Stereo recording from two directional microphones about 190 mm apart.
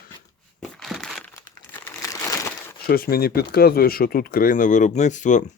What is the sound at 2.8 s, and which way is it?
Speech, 50° left (ahead or behind).